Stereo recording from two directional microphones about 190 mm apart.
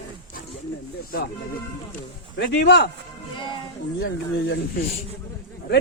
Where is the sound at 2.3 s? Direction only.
65° left (ahead or behind).